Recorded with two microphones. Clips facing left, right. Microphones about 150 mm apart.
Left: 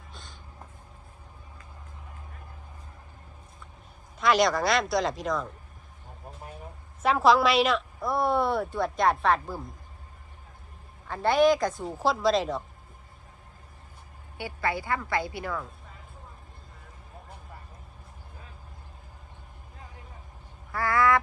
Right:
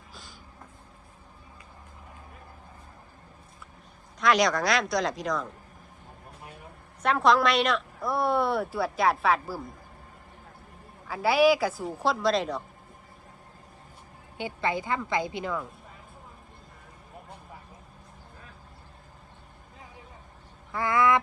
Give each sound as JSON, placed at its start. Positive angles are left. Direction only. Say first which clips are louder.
{"t": 0.1, "sound": "a sound", "louder": "even", "side_deg": 0}
{"t": 4.2, "sound": "a woman's voice", "louder": "even", "side_deg": 0}
{"t": 7.0, "sound": "a woman's voice", "louder": "left 1 dB", "side_deg": 0}
{"t": 11.1, "sound": "a woman's voice", "louder": "even", "side_deg": -5}
{"t": 14.3, "sound": "a woman's voice", "louder": "right 1 dB", "side_deg": -20}
{"t": 20.7, "sound": "a woman's voice", "louder": "even", "side_deg": -20}